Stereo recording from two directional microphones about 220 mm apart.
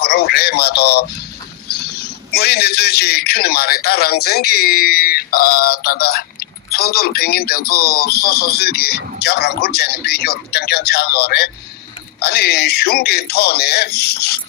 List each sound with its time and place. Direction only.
0.0 s speech: 45° left (ahead or behind)
1.7 s a sound: 45° left (ahead or behind)
2.3 s speech: 45° left (ahead or behind)